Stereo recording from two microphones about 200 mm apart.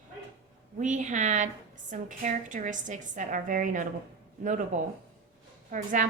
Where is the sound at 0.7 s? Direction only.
40° right (ahead or behind).